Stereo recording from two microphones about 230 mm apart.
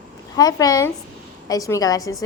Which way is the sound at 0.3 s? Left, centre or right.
Centre.